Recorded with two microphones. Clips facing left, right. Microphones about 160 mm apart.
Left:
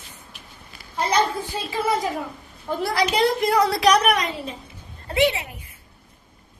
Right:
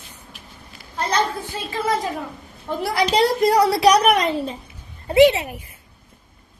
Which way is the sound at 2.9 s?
30° right (ahead or behind).